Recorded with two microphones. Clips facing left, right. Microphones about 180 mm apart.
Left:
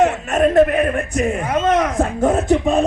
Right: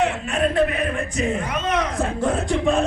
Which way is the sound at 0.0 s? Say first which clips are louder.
Left 6 dB; 45° left (ahead or behind).